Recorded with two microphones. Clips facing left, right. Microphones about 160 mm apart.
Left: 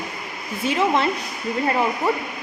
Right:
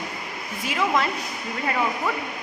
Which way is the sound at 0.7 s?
30° left (ahead or behind).